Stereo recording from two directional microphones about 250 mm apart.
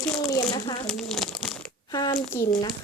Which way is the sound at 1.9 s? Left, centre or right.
Centre.